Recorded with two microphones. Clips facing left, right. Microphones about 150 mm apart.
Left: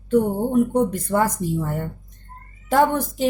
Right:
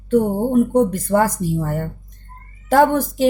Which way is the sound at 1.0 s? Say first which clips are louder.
Right 4 dB; 45° right (ahead or behind).